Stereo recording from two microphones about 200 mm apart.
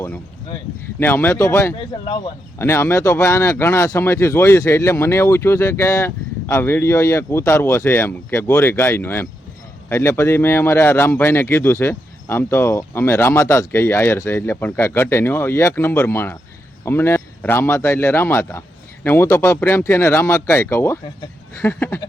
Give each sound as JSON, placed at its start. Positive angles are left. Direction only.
{"t": 0.9, "sound": "speech", "side_deg": 10}